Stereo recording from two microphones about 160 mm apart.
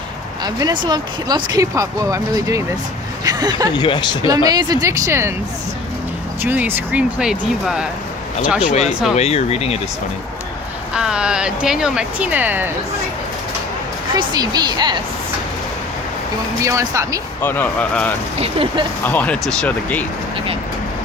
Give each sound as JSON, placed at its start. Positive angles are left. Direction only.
{"t": 0.4, "sound": "speech", "side_deg": -25}
{"t": 3.8, "sound": "speech", "side_deg": 25}
{"t": 4.4, "sound": "speech", "side_deg": -25}
{"t": 6.4, "sound": "speech", "side_deg": -10}
{"t": 8.6, "sound": "speech", "side_deg": 45}
{"t": 10.9, "sound": "speech", "side_deg": -5}
{"t": 14.1, "sound": "speech", "side_deg": -25}
{"t": 16.6, "sound": "speech", "side_deg": -20}
{"t": 17.4, "sound": "speech", "side_deg": 10}
{"t": 18.3, "sound": "speech", "side_deg": -35}
{"t": 19.0, "sound": "speech", "side_deg": 10}